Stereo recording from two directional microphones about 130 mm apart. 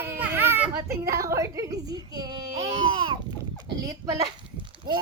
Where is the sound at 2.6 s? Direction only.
50° right (ahead or behind).